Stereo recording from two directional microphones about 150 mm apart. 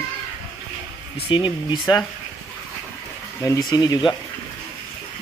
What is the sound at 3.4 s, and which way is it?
Speech, 20° left (ahead or behind).